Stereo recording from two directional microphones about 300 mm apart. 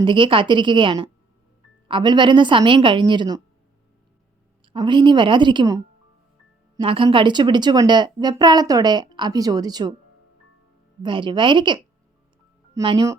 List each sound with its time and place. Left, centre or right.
0.0 s speech: centre
4.7 s speech: centre
6.8 s speech: centre
11.0 s speech: centre